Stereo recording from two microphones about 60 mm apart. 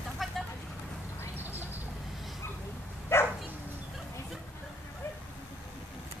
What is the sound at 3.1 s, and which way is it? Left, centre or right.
Dog, left.